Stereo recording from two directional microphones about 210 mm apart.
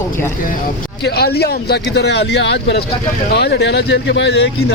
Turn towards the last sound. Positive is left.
turn(degrees=55)  # may be behind; listen again after turning